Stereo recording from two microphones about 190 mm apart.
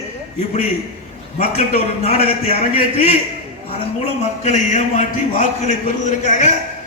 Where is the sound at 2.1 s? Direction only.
30° left (ahead or behind).